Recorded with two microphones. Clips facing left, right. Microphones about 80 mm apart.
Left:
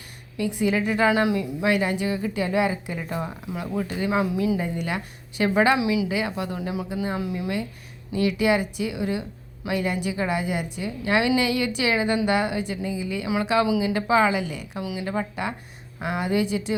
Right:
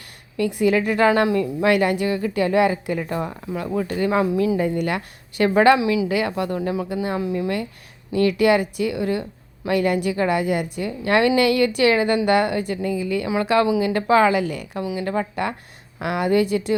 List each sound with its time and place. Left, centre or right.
0.3 s a woman's voice: right